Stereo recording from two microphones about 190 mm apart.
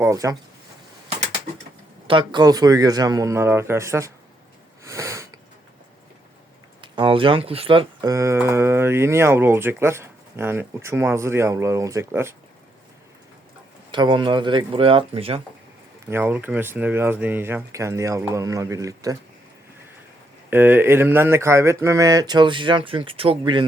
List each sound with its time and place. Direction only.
0.0 s speech: 15° right (ahead or behind)
2.0 s a man's voice: 25° right (ahead or behind)
4.8 s sniff: 15° right (ahead or behind)
6.8 s speech: 25° right (ahead or behind)
8.1 s speech: 15° right (ahead or behind)
13.9 s a man's voice: 25° right (ahead or behind)
16.0 s speech: 10° right (ahead or behind)
20.5 s a man's voice: 10° right (ahead or behind)